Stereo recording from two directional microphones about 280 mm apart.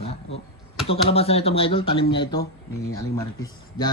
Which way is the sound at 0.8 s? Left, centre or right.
Left.